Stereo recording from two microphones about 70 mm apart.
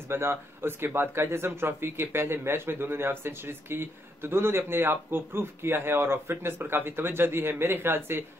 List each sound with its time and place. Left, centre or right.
0.1 s speech: right